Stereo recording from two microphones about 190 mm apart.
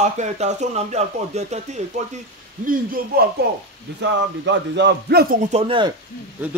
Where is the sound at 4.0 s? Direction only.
65° right (ahead or behind).